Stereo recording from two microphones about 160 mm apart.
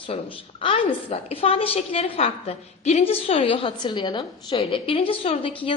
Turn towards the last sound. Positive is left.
turn(degrees=35)  # may be behind; listen again after turning